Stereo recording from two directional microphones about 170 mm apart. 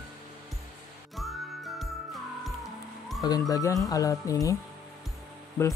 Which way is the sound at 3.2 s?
20° left (ahead or behind).